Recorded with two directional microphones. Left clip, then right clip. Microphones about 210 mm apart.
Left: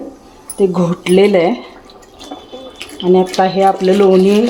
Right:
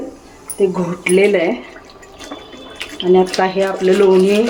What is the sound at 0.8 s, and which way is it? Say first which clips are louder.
Speech: left 3 dB; 35° left (ahead or behind).